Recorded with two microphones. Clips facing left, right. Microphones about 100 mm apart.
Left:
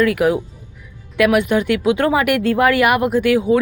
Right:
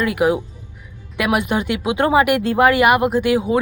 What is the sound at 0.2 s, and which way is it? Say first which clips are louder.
A woman's voice: left 1 dB; 5° right (ahead or behind).